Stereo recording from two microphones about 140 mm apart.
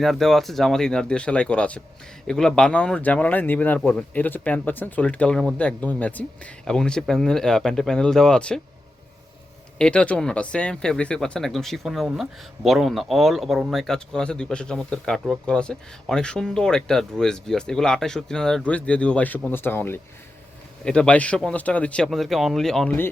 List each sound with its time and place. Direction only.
0.0 s speech: centre (ahead or behind)
9.7 s speech: 5° left (ahead or behind)